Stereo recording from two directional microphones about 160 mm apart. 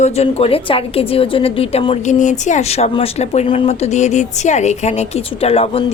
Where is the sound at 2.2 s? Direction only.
50° left (ahead or behind).